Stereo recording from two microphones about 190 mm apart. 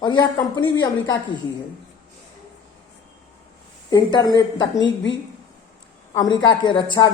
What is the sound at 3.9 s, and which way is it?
Speech, 20° left (ahead or behind).